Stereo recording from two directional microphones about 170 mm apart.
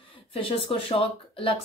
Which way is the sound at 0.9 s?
35° left (ahead or behind).